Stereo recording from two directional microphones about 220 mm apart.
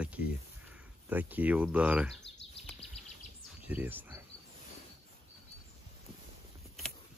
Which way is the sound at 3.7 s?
10° right (ahead or behind).